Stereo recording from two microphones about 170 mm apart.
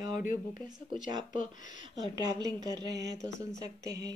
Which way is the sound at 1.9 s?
25° right (ahead or behind).